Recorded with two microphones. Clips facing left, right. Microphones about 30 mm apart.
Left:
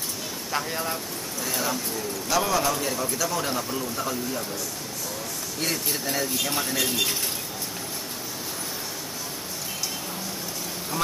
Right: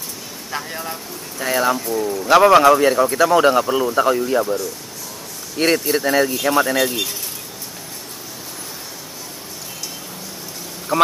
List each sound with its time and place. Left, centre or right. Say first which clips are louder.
0.5 s speech: right 1 dB; centre
1.4 s speech: right 11 dB; right
1.9 s speech: right 10 dB; centre
2.2 s speech: right 14 dB; right
5.6 s speech: right 12 dB; right
10.9 s speech: right 14 dB; right